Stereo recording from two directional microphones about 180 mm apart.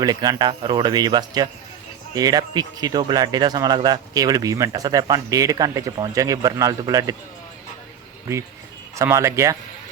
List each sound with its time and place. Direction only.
0.0 s speech: 20° right (ahead or behind)
9.0 s speech: 15° right (ahead or behind)